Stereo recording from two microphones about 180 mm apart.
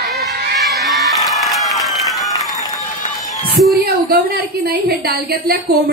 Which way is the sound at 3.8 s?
60° right (ahead or behind).